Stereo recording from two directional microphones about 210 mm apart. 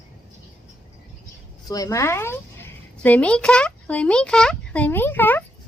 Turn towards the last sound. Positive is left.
turn(degrees=10)  # may be behind; listen again after turning